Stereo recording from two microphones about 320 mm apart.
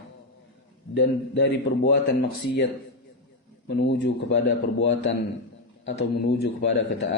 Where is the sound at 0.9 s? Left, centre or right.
Left.